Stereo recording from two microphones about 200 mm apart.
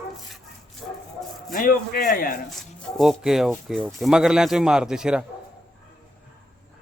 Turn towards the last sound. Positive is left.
turn(degrees=-5)  # may be behind; listen again after turning